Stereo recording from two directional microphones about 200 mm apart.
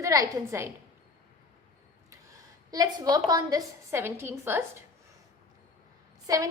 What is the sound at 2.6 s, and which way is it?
A woman's voice, 20° right (ahead or behind).